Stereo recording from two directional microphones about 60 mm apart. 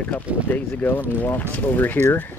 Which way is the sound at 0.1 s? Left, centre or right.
Left.